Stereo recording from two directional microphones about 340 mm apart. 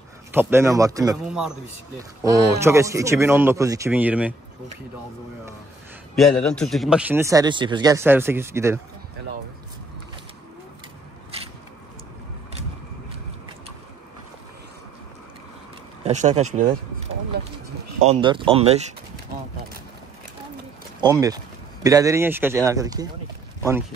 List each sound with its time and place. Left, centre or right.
0.3 s speech: centre
6.4 s speech: centre
11.3 s biting: centre
16.0 s speech: centre
18.0 s speech: centre
21.0 s speech: centre